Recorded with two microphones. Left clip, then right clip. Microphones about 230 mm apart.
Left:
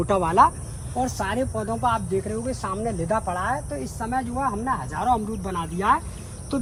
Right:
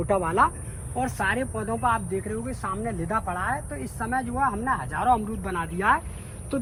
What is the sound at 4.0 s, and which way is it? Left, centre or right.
Speech, centre.